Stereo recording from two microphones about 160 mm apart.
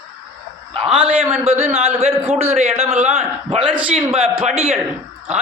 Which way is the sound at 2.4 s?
40° right (ahead or behind).